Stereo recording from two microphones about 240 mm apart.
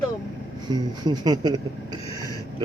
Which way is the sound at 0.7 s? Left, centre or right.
Centre.